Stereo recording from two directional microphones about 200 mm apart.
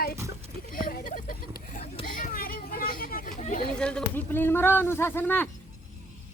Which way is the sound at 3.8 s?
5° left (ahead or behind).